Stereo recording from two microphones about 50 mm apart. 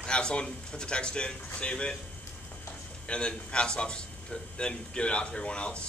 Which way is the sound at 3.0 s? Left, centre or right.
Left.